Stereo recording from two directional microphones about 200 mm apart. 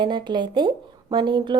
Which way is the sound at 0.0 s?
20° right (ahead or behind).